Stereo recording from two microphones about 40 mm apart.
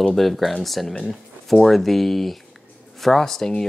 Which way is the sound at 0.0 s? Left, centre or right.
Centre.